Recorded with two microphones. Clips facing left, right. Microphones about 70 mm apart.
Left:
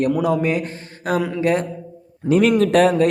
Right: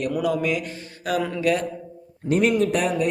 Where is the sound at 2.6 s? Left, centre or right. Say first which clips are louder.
Left 7 dB; left.